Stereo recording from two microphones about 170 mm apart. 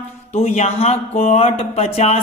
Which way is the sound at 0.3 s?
40° left (ahead or behind).